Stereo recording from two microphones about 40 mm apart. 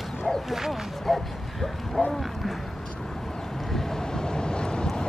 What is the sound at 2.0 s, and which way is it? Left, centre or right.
Speech, centre.